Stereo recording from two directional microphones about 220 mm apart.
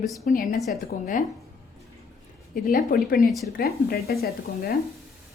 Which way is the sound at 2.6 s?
40° left (ahead or behind).